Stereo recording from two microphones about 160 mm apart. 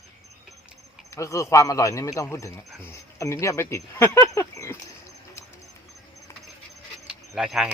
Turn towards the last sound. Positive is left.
turn(degrees=-5)  # may be behind; listen again after turning